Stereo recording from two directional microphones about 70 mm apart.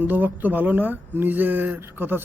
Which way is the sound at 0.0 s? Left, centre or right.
Right.